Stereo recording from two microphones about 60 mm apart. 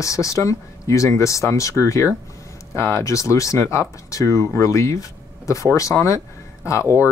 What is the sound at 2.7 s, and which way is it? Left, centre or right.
Speech, left.